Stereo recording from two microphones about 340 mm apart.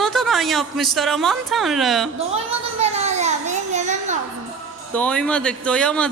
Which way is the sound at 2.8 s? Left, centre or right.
Centre.